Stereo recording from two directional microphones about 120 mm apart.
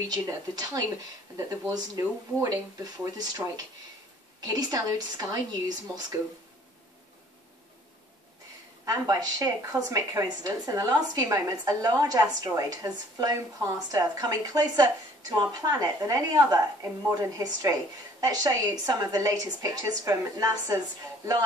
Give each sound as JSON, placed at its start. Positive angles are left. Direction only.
{"t": 0.1, "sound": "speech", "side_deg": -30}
{"t": 8.8, "sound": "a woman's voice", "side_deg": -30}
{"t": 12.2, "sound": "a woman's voice", "side_deg": -20}
{"t": 12.6, "sound": "a woman's voice", "side_deg": -30}